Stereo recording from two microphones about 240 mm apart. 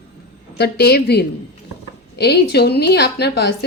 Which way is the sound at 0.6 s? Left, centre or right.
Left.